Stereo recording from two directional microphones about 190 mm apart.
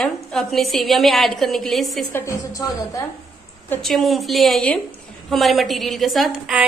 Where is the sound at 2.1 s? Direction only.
15° left (ahead or behind).